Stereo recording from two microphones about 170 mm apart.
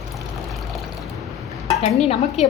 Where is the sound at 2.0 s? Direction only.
40° left (ahead or behind).